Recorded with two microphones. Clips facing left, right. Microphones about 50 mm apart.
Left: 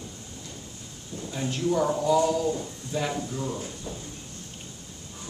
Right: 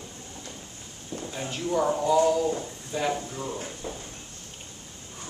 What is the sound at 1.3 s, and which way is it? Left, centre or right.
A woman's voice, centre.